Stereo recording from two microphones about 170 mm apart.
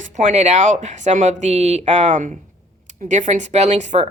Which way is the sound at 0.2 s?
40° right (ahead or behind).